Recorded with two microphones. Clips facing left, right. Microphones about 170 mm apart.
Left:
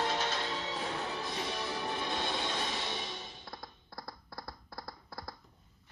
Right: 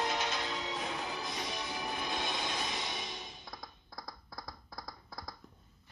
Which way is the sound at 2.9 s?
30° left (ahead or behind).